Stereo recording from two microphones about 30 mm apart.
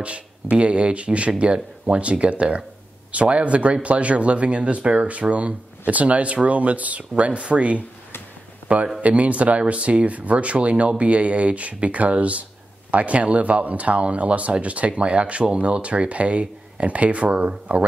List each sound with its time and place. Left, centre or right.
0.0 s speech: right
9.0 s a man's voice: right
9.6 s speech: right